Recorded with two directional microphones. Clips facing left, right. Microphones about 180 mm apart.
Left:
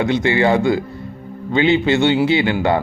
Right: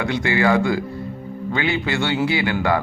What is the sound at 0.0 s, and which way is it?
A man's voice, 20° left (ahead or behind).